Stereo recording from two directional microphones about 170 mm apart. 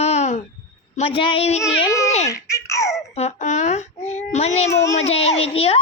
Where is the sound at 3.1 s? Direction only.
40° left (ahead or behind).